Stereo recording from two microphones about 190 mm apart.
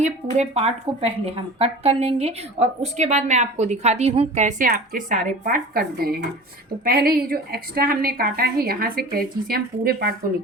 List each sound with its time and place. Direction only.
0.0 s a woman's voice: 35° right (ahead or behind); by 10.1 s 55° right (ahead or behind)